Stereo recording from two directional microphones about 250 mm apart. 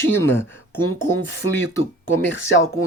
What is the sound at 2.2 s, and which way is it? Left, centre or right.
Speech, left.